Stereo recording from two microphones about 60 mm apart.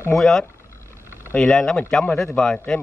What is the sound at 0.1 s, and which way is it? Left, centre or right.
A man's voice, centre.